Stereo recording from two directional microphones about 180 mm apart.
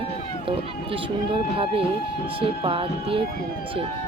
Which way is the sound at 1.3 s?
30° right (ahead or behind).